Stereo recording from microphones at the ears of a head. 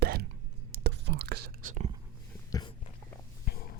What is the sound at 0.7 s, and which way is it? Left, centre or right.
Whispering, right.